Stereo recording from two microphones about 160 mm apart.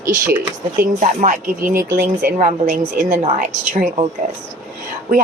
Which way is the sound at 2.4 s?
55° right (ahead or behind).